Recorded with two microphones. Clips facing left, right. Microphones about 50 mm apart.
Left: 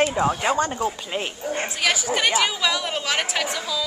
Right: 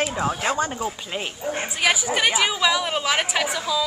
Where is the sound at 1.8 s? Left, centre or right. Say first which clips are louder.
Right 2 dB; centre.